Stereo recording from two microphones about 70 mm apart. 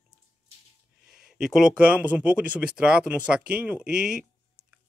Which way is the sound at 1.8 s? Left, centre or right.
Centre.